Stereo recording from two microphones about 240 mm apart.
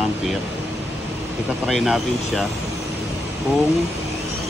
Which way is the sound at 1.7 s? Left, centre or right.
Centre.